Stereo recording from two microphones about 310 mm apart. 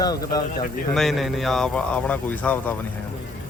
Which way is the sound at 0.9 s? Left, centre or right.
Centre.